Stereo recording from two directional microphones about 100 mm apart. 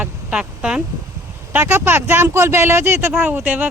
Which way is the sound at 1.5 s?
20° right (ahead or behind).